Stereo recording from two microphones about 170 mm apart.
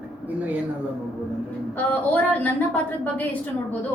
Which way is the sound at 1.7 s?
10° left (ahead or behind).